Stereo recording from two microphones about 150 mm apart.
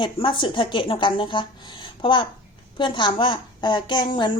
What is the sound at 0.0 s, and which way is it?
A woman's voice, 35° left (ahead or behind).